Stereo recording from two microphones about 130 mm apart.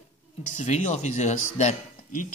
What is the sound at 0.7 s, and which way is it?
A man's voice, 65° left (ahead or behind).